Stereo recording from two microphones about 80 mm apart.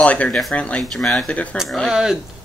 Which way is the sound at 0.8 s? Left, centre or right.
Centre.